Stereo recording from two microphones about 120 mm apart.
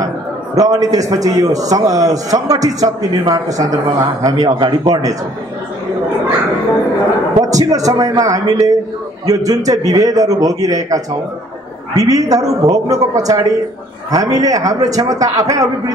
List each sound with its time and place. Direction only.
0.6 s a man's voice: 30° right (ahead or behind)
7.3 s a man's voice: 30° right (ahead or behind)